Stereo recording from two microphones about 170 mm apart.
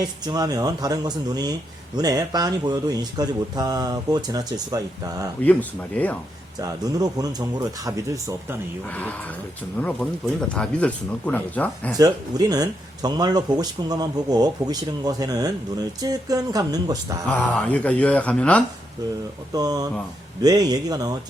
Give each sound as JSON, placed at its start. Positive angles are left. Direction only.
{"t": 0.0, "sound": "speech", "side_deg": -25}
{"t": 5.4, "sound": "speech", "side_deg": 10}
{"t": 6.6, "sound": "speech", "side_deg": -20}
{"t": 10.5, "sound": "speech", "side_deg": 5}
{"t": 11.9, "sound": "speech", "side_deg": -20}
{"t": 17.2, "sound": "speech", "side_deg": 10}
{"t": 19.5, "sound": "speech", "side_deg": -20}